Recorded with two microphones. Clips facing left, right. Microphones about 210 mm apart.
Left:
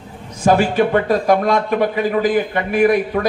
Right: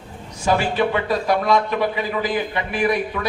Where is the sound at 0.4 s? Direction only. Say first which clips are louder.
Left 5 dB; 45° left (ahead or behind).